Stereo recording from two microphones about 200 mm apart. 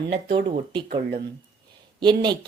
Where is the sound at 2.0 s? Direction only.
20° right (ahead or behind).